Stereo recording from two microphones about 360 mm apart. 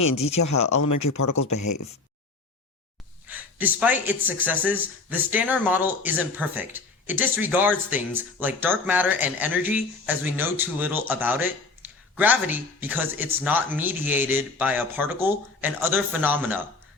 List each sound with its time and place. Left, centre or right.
0.3 s speech: left
3.2 s speech: centre